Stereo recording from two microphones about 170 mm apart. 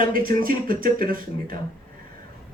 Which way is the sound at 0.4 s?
55° right (ahead or behind).